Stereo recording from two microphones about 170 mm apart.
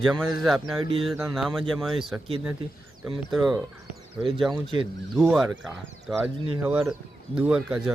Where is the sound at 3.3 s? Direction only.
Centre (ahead or behind).